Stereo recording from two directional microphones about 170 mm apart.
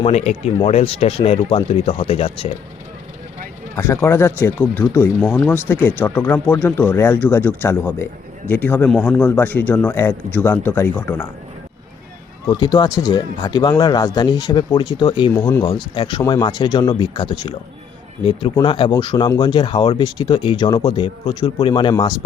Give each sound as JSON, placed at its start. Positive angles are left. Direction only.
{"t": 0.0, "sound": "speech", "side_deg": 40}
{"t": 3.8, "sound": "speech", "side_deg": 15}
{"t": 12.5, "sound": "speech", "side_deg": 25}